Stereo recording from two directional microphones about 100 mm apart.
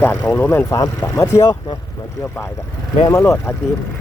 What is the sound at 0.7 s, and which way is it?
Speech, 30° left (ahead or behind).